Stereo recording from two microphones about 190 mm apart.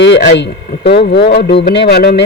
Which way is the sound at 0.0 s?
70° left (ahead or behind).